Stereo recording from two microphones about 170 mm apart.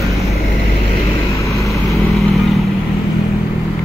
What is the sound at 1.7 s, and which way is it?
Vehicle, centre (ahead or behind).